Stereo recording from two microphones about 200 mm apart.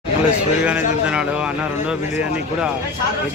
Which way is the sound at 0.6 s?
5° right (ahead or behind).